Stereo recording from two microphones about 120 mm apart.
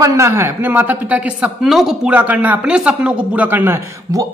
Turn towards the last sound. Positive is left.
turn(degrees=-25)  # may be behind; listen again after turning